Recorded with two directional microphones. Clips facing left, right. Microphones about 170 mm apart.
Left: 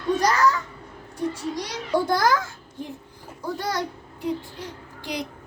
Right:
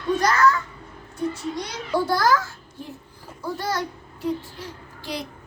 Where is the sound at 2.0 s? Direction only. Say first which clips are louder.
Right 1 dB; 15° left (ahead or behind).